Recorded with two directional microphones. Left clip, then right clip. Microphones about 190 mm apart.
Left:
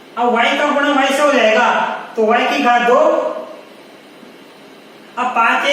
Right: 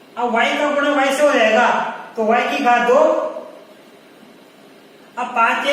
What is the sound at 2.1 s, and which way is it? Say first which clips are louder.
Speech: left 3 dB; 15° left (ahead or behind).